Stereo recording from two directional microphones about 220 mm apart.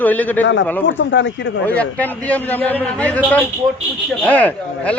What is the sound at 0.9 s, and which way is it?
Speech, 55° left (ahead or behind).